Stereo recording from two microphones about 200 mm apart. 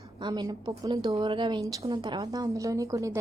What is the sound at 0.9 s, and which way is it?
A woman's voice, 30° right (ahead or behind).